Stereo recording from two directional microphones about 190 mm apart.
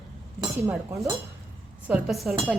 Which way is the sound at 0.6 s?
15° right (ahead or behind).